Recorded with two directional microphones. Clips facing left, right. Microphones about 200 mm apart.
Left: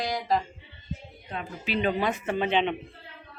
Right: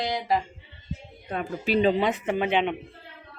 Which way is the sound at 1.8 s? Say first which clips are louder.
Right 4 dB; 25° right (ahead or behind).